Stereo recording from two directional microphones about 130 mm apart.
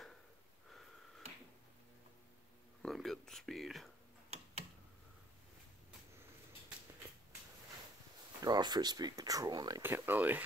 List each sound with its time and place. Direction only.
2.8 s a sound: centre (ahead or behind)
8.4 s speech: 30° right (ahead or behind)
9.8 s speech: 15° right (ahead or behind)